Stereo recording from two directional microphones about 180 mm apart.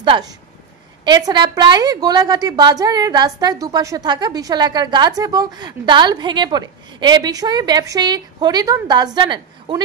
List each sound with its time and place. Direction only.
0.0 s a woman's voice: 25° right (ahead or behind)